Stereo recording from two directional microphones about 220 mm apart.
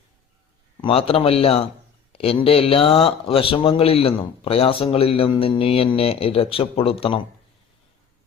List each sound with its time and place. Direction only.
0.8 s speech: 25° left (ahead or behind)